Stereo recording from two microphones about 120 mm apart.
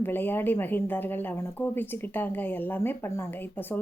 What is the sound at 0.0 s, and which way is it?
A woman's voice, 15° left (ahead or behind).